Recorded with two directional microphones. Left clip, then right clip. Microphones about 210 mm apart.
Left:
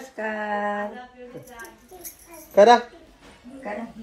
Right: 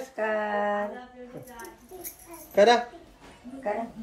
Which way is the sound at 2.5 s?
Centre (ahead or behind).